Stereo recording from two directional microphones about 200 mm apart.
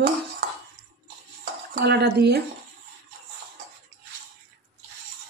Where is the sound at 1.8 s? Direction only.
55° right (ahead or behind).